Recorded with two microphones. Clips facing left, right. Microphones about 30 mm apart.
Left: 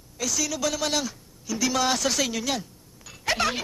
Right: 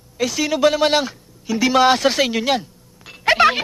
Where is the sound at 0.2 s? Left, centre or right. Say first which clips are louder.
Right 10 dB; right.